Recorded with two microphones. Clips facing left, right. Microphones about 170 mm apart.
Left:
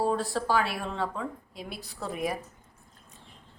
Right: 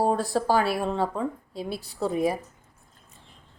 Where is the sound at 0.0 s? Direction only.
40° right (ahead or behind).